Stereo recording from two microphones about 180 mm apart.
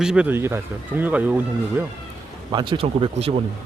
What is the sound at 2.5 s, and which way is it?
Speech, 25° right (ahead or behind).